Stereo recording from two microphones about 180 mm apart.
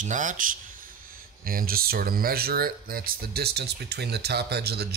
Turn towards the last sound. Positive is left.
turn(degrees=-60)  # may be behind; listen again after turning